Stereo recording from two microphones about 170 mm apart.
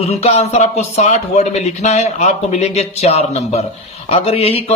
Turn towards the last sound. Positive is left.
turn(degrees=35)  # may be behind; listen again after turning